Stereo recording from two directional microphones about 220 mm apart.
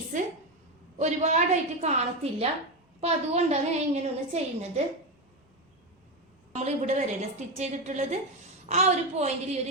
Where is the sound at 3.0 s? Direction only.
30° right (ahead or behind).